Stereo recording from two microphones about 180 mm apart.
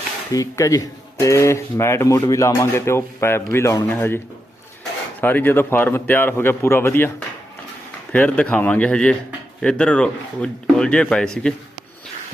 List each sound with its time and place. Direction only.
0.3 s speech: 20° left (ahead or behind)
5.2 s speech: 10° left (ahead or behind)
8.1 s speech: 10° left (ahead or behind)